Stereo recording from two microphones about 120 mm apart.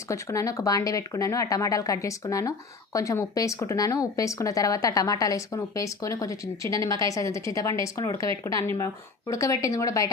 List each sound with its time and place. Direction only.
0.1 s speech: 25° left (ahead or behind)